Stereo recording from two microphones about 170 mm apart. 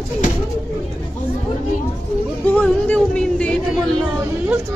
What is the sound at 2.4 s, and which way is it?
Music, 10° left (ahead or behind).